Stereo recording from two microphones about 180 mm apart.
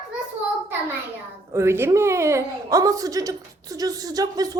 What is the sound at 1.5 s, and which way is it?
A woman's voice, 15° right (ahead or behind).